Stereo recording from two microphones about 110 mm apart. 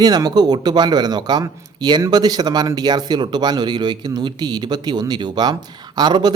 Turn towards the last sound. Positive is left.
turn(degrees=-40)  # may be behind; listen again after turning